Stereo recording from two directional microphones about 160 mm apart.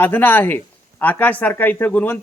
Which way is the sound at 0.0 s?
10° left (ahead or behind).